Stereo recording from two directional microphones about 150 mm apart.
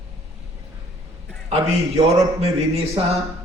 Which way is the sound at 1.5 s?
45° right (ahead or behind).